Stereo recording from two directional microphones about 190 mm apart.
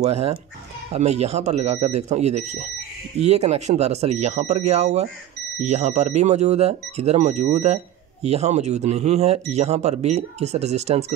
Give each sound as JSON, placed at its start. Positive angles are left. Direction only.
{"t": 0.0, "sound": "speech", "side_deg": -35}